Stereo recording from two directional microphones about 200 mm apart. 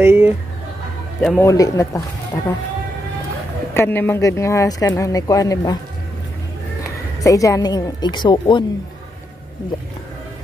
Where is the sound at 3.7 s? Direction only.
10° left (ahead or behind).